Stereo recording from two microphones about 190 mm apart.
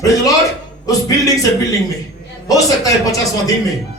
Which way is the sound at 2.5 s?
20° left (ahead or behind).